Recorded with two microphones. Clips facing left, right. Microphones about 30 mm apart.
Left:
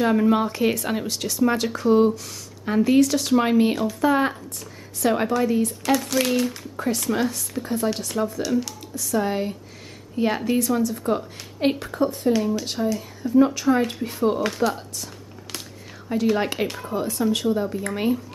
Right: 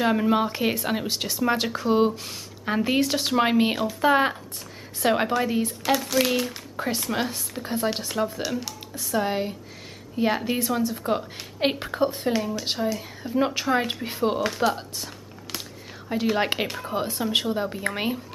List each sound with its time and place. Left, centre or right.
0.0 s speech: centre
1.0 s speech: right
5.9 s speech: centre
7.2 s speech: right
8.9 s a woman's voice: right; by 10.4 s centre
10.4 s a woman's voice: centre
12.4 s speech: centre
12.7 s speech: centre
14.4 s speech: centre
16.1 s speech: centre